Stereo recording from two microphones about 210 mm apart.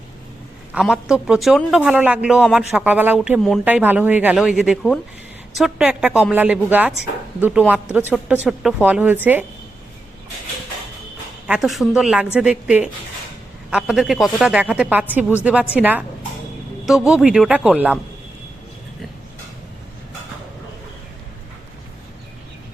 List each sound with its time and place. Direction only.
0.7 s a woman's voice: centre (ahead or behind)
11.4 s a woman's voice: 5° right (ahead or behind)
17.1 s a woman's voice: 5° right (ahead or behind)